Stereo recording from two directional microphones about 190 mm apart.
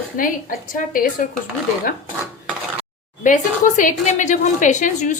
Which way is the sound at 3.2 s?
40° left (ahead or behind).